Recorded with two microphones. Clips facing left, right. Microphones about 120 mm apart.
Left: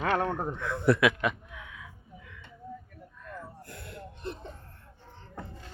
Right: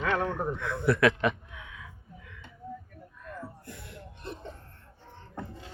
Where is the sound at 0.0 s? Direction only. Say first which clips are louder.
Left 1 dB; 45° left (ahead or behind).